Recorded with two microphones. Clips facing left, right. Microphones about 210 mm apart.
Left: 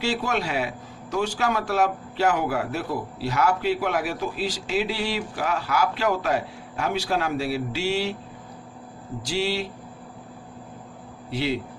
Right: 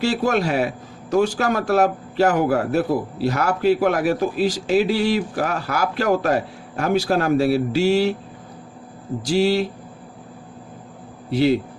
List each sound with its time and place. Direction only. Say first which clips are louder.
0.0 s a man's voice: right 6 dB; 40° right (ahead or behind)
9.2 s speech: right 8 dB; 40° right (ahead or behind)
11.3 s a man's voice: right 9 dB; 40° right (ahead or behind)